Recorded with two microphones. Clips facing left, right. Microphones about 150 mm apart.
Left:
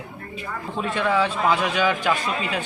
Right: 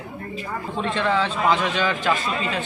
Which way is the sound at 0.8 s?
10° left (ahead or behind).